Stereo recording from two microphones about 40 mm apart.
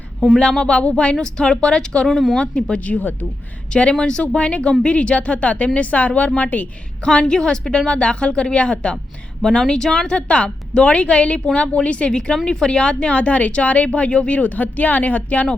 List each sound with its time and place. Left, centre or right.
0.6 s a woman's voice: left
1.2 s a woman's voice: centre
2.0 s speech: centre
2.4 s a woman's voice: left
2.8 s speech: left
3.9 s a woman's voice: left
4.4 s speech: left
7.0 s a woman's voice: left
10.1 s a woman's voice: left
13.1 s speech: left